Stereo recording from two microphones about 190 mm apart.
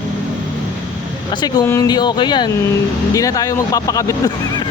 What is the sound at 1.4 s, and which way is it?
Speech, 15° left (ahead or behind).